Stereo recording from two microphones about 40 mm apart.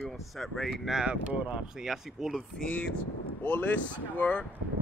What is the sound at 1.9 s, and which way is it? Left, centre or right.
Speech, centre.